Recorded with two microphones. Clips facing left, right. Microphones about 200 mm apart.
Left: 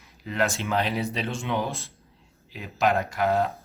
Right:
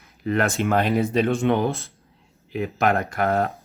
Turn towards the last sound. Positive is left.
turn(degrees=-55)  # may be behind; listen again after turning